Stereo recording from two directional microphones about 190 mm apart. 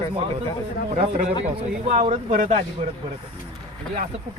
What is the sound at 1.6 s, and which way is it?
Speech, 35° right (ahead or behind).